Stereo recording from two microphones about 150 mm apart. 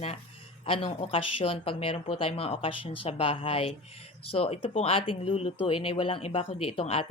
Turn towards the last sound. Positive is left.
turn(degrees=40)  # may be behind; listen again after turning